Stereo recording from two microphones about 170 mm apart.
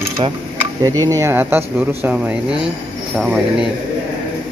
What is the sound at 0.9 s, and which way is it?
Speech, 15° right (ahead or behind).